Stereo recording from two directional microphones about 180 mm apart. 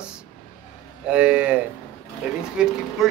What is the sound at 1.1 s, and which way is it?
Speech, 5° right (ahead or behind).